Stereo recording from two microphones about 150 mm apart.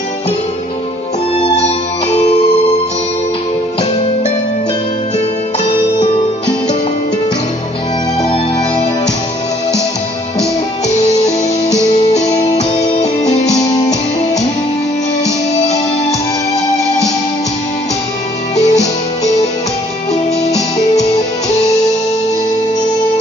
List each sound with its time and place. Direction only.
8.2 s music: 45° left (ahead or behind)
10.9 s music: 50° left (ahead or behind)
13.3 s music: 50° left (ahead or behind)
15.6 s music: 45° left (ahead or behind)
18.6 s music: 50° left (ahead or behind)